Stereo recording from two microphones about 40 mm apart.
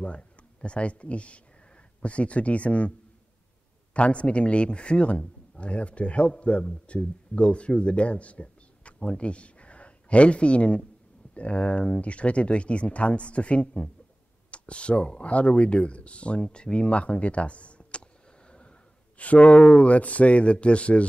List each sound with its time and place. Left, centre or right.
0.0 s speech: left
3.9 s speech: left
18.5 s a sound: left
19.8 s speech: left